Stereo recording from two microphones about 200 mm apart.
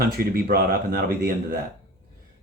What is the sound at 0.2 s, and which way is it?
Speech, 50° right (ahead or behind).